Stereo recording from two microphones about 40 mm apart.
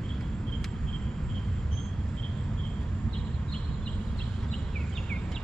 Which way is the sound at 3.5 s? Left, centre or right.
Left.